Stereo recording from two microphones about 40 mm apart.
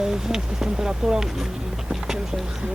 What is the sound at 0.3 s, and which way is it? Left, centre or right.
Speech, centre.